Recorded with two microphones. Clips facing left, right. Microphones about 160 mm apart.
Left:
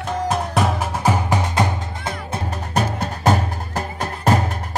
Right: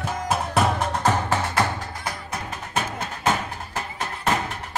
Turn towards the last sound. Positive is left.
turn(degrees=40)  # may be behind; listen again after turning